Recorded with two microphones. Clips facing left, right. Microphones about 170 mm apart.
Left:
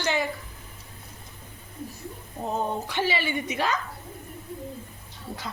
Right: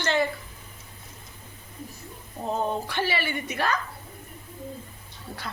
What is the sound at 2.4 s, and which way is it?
A woman's voice, 15° left (ahead or behind).